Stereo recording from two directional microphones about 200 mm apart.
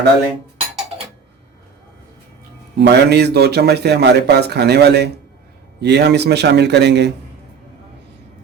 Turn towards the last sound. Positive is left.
turn(degrees=-60)  # may be behind; listen again after turning